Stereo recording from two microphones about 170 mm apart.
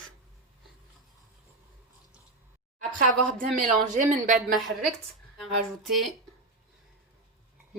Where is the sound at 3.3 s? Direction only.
50° right (ahead or behind).